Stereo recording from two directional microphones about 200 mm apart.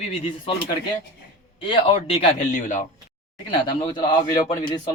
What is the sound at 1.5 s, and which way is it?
A man's voice, 25° left (ahead or behind).